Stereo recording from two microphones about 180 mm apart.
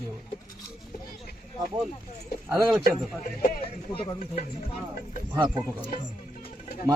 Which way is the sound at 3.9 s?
30° left (ahead or behind).